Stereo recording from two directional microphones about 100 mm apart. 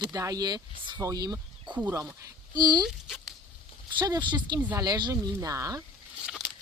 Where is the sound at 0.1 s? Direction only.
40° right (ahead or behind).